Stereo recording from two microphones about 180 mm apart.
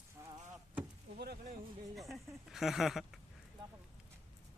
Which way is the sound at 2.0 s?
Centre (ahead or behind).